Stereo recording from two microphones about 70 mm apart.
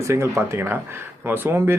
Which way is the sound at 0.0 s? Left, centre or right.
Right.